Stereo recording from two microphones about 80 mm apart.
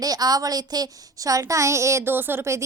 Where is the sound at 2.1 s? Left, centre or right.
Right.